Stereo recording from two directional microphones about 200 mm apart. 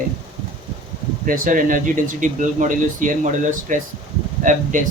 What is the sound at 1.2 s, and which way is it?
Speech, 45° right (ahead or behind).